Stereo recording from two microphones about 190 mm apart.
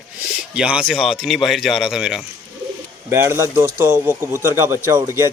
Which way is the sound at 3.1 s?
15° right (ahead or behind).